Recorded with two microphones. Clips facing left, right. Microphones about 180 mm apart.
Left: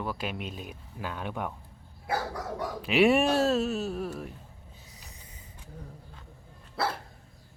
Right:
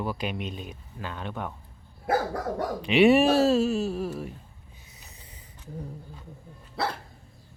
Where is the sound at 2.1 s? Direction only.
50° right (ahead or behind).